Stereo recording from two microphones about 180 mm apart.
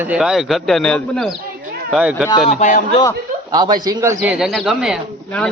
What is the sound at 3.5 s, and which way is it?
Speech, 25° right (ahead or behind).